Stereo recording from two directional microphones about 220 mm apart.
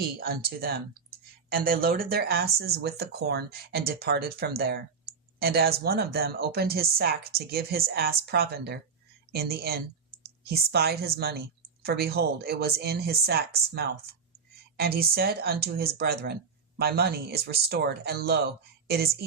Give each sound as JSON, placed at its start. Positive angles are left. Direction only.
{"t": 0.0, "sound": "speech", "side_deg": -45}